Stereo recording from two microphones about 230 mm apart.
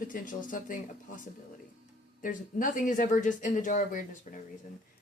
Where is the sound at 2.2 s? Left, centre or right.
Left.